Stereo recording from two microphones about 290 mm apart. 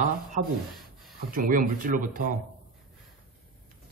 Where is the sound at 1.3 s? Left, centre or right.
Right.